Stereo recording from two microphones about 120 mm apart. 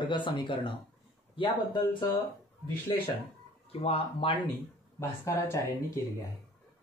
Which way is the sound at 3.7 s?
55° left (ahead or behind).